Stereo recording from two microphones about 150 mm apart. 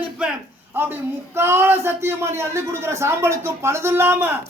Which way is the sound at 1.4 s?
15° right (ahead or behind).